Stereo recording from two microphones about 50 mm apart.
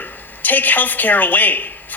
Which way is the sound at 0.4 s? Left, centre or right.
Left.